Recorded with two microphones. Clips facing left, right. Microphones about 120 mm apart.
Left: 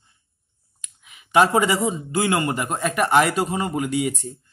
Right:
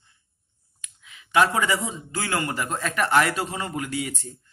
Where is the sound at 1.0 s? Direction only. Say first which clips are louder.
Left 3 dB; 20° left (ahead or behind).